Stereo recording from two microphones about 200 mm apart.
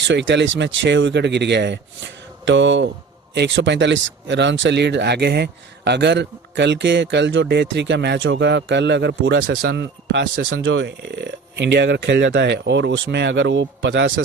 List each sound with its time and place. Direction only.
0.1 s speech: 65° right (ahead or behind)